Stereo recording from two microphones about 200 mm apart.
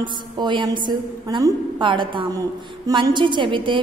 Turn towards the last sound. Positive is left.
turn(degrees=-25)  # may be behind; listen again after turning